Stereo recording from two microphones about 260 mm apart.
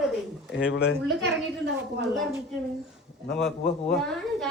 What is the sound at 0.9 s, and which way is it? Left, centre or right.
Speech, centre.